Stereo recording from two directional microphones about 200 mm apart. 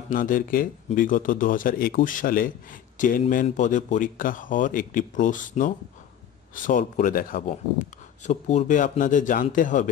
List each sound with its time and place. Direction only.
0.1 s a man's voice: 45° left (ahead or behind)